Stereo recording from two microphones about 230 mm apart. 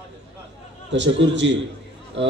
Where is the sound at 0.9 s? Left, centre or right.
Right.